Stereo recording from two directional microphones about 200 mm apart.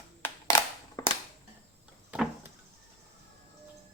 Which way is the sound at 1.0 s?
20° left (ahead or behind).